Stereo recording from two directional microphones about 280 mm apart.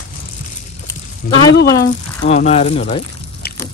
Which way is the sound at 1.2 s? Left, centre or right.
Left.